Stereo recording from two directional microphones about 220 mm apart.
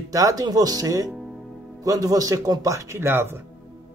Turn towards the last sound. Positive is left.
turn(degrees=-10)  # may be behind; listen again after turning